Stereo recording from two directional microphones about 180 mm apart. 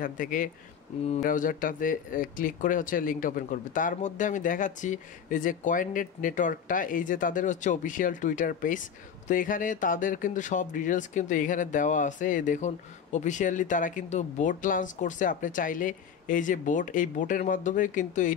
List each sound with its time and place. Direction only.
0.0 s speech: 50° left (ahead or behind)